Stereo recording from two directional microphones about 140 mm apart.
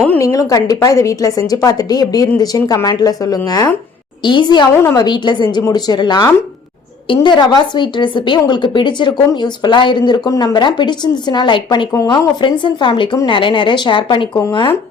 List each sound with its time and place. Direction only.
0.2 s a woman's voice: 25° left (ahead or behind)
4.8 s a woman's voice: 20° left (ahead or behind)
5.0 s a woman's voice: 30° left (ahead or behind)